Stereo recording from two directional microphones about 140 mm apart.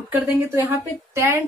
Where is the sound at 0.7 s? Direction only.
15° right (ahead or behind).